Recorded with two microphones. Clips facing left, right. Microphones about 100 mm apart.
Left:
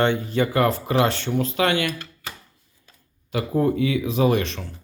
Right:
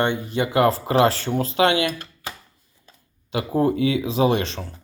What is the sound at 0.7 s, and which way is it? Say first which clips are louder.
Speech: right 3 dB; 35° right (ahead or behind).